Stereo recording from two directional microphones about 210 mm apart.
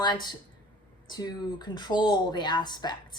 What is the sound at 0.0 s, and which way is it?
A woman's voice, 20° left (ahead or behind).